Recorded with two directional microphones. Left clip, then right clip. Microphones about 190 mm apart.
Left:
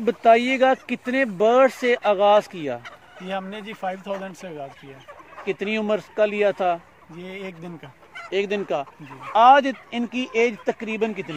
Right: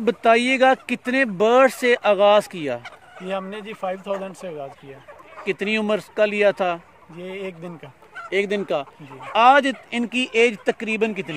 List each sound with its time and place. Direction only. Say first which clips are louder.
0.0 s speech: left 1 dB; 60° right (ahead or behind)
3.3 s speech: right 2 dB; 20° right (ahead or behind)
5.4 s speech: right 2 dB; 55° right (ahead or behind)
7.2 s speech: right 3 dB; 25° right (ahead or behind)
8.3 s speech: right 2 dB; 45° right (ahead or behind)